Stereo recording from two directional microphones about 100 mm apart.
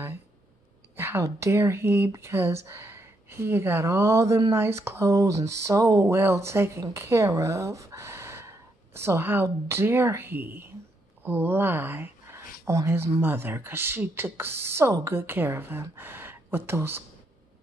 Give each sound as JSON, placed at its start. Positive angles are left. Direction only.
{"t": 0.9, "sound": "speech", "side_deg": -25}